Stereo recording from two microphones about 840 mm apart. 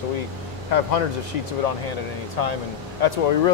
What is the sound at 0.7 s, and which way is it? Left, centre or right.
A man's voice, left.